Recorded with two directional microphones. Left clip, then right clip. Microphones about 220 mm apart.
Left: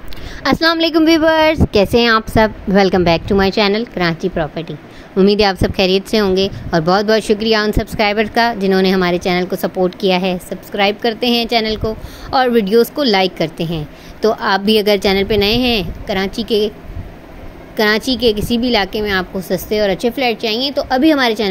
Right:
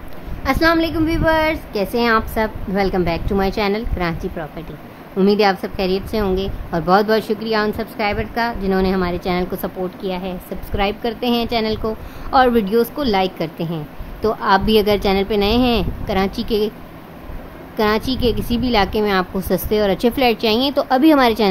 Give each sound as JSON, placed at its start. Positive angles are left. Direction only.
{"t": 0.4, "sound": "a woman's voice", "side_deg": 30}
{"t": 10.5, "sound": "a woman's voice", "side_deg": 5}
{"t": 17.7, "sound": "a woman's voice", "side_deg": 5}